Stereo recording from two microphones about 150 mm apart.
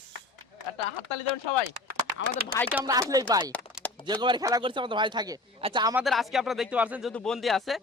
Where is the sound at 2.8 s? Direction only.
25° right (ahead or behind).